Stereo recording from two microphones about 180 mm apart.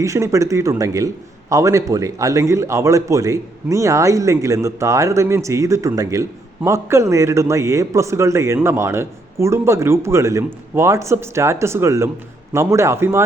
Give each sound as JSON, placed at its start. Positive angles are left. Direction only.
{"t": 0.0, "sound": "a man's voice", "side_deg": -15}